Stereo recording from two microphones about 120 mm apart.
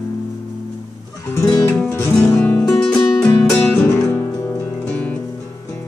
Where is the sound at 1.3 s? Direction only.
30° left (ahead or behind).